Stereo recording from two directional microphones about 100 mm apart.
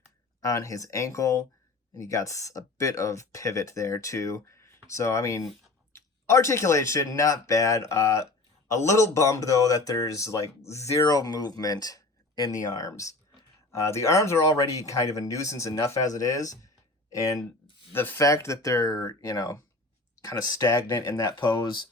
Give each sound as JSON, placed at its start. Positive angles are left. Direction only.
{"t": 0.4, "sound": "speech", "side_deg": 30}
{"t": 11.0, "sound": "speech", "side_deg": 40}
{"t": 17.9, "sound": "speech", "side_deg": 20}
{"t": 18.2, "sound": "speech", "side_deg": 30}
{"t": 21.3, "sound": "speech", "side_deg": 50}